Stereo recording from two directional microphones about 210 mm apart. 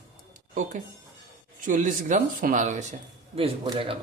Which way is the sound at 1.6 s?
35° right (ahead or behind).